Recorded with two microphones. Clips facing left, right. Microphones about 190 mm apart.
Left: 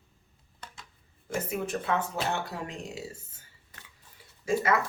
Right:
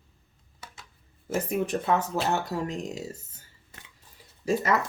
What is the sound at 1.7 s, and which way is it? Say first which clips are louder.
Speech: right 4 dB; 40° right (ahead or behind).